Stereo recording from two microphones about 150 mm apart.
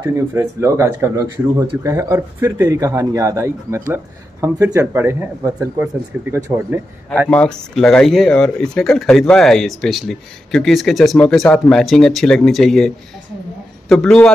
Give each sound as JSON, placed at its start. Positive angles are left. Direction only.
{"t": 0.0, "sound": "speech", "side_deg": -15}
{"t": 7.2, "sound": "speech", "side_deg": 5}